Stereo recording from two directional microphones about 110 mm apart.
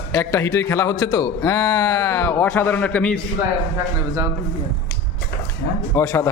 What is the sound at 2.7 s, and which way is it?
Speech, 15° left (ahead or behind).